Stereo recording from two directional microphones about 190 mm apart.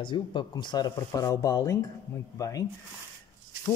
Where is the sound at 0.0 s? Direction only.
25° left (ahead or behind).